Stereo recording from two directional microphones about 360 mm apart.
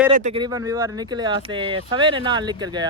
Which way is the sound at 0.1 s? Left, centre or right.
Centre.